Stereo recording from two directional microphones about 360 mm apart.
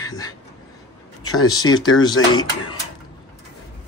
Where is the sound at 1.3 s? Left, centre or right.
Left.